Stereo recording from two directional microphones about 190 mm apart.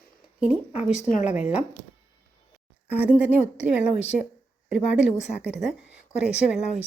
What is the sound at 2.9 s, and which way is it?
A woman's voice, 10° right (ahead or behind).